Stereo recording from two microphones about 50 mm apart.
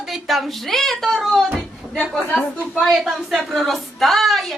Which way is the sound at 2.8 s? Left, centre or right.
Centre.